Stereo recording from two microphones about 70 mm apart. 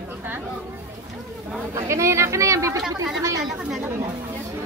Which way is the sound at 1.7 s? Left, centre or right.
Right.